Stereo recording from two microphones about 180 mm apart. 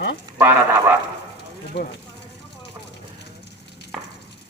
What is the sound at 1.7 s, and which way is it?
Speech, 70° left (ahead or behind).